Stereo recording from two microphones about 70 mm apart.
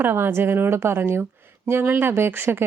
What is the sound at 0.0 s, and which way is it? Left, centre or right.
Speech, right.